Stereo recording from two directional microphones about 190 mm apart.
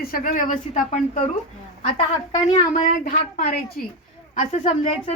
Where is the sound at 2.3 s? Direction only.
40° left (ahead or behind).